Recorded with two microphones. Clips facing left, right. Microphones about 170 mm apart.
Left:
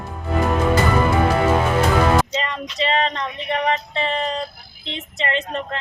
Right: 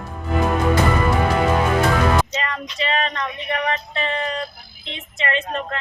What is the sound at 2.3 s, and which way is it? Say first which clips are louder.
Female singing: left 1 dB; 25° left (ahead or behind).